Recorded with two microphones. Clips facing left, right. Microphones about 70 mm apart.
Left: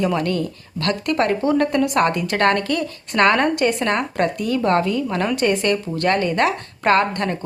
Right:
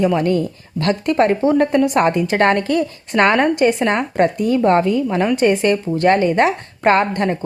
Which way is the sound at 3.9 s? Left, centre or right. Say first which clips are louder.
Right 4 dB; right.